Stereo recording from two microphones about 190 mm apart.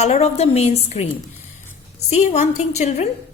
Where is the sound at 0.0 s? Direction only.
35° left (ahead or behind).